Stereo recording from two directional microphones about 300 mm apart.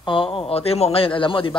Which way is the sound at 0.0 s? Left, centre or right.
Centre.